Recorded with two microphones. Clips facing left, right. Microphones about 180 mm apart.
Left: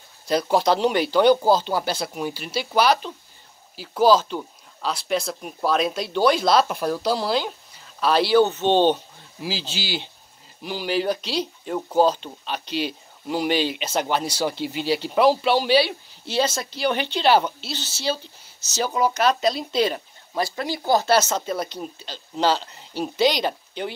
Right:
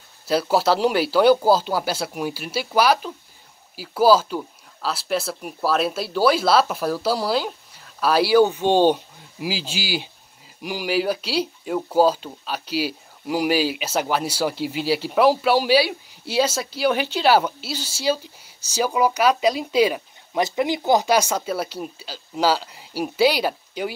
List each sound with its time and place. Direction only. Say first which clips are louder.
0.3 s speech: right 1 dB; 5° right (ahead or behind)